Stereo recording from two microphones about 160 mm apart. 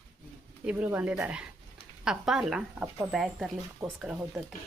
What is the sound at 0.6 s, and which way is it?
Speech, 10° right (ahead or behind).